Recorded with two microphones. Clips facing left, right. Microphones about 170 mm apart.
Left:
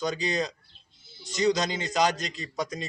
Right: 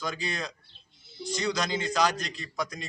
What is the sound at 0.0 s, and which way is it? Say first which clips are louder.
A man's voice: left 6 dB; 20° left (ahead or behind).